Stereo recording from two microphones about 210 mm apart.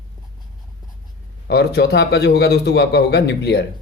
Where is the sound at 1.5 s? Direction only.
50° left (ahead or behind).